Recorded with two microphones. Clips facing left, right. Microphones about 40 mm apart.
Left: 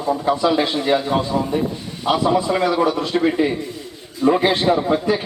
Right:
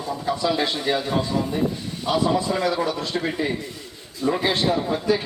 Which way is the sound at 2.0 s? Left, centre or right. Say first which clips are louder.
Left 4 dB; left.